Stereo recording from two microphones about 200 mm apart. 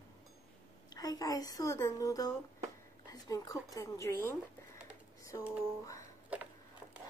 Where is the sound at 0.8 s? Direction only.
20° left (ahead or behind).